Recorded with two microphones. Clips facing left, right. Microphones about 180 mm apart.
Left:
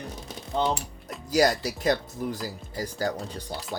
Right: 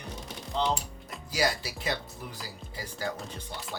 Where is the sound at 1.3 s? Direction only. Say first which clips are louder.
Left 7 dB; 45° left (ahead or behind).